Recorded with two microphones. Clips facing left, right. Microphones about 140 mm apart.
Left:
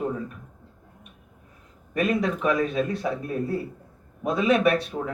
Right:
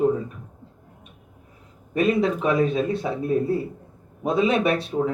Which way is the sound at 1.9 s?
25° right (ahead or behind).